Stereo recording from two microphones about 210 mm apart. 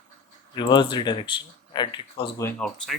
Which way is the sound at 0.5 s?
20° left (ahead or behind).